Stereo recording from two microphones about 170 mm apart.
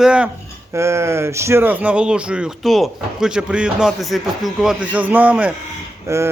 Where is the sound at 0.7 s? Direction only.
15° right (ahead or behind).